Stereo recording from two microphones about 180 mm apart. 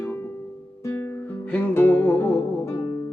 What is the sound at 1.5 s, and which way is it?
Music, 10° left (ahead or behind).